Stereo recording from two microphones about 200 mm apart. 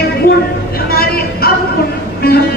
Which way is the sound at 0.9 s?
50° left (ahead or behind).